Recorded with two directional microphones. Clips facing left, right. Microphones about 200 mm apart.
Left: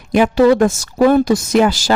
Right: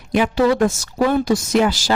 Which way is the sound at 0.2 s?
50° left (ahead or behind).